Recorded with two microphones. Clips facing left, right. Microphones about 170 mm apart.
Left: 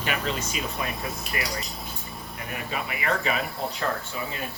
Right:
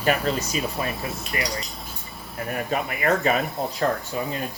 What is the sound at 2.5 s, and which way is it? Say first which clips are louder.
Speech: right 6 dB; 45° right (ahead or behind).